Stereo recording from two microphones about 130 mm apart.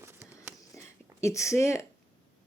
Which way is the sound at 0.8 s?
25° left (ahead or behind).